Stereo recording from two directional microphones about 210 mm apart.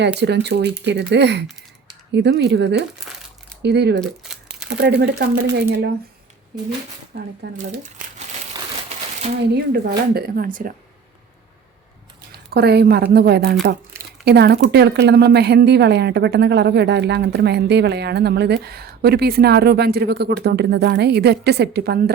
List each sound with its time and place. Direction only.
0.0 s a woman's voice: 55° right (ahead or behind)
7.1 s a woman's voice: 55° right (ahead or behind)
7.6 s speech: 40° right (ahead or behind)
9.5 s a woman's voice: 50° right (ahead or behind)
12.3 s a woman's voice: 50° right (ahead or behind)